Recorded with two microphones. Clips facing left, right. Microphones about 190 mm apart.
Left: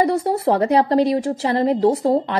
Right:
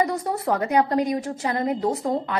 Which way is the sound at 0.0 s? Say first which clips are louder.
Left 6 dB; 30° left (ahead or behind).